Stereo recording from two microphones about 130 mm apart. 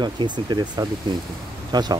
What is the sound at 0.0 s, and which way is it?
Speech, 35° right (ahead or behind).